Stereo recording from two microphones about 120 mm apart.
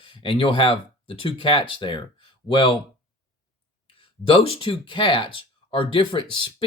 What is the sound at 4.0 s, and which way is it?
Speech, 50° left (ahead or behind).